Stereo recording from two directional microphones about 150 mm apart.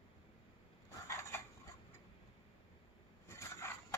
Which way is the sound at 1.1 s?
20° left (ahead or behind).